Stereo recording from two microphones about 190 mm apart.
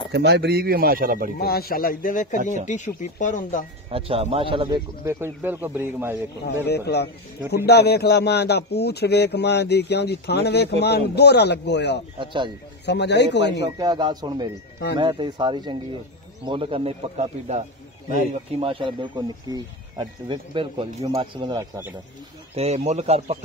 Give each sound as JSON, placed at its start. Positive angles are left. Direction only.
{"t": 0.1, "sound": "speech", "side_deg": -60}
{"t": 1.4, "sound": "a man's voice", "side_deg": 55}
{"t": 3.9, "sound": "speech", "side_deg": -30}
{"t": 5.0, "sound": "speech", "side_deg": -10}
{"t": 6.4, "sound": "speech", "side_deg": 60}
{"t": 12.2, "sound": "speech", "side_deg": -25}
{"t": 12.8, "sound": "speech", "side_deg": 65}
{"t": 13.7, "sound": "speech", "side_deg": -25}
{"t": 22.6, "sound": "speech", "side_deg": -35}